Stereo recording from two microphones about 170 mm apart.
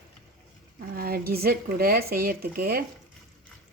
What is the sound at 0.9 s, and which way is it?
Speech, 60° right (ahead or behind).